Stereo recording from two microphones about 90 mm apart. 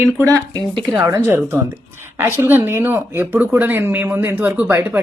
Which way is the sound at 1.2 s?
25° right (ahead or behind).